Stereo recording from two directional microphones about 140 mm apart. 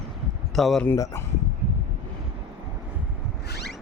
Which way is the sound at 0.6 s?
Centre (ahead or behind).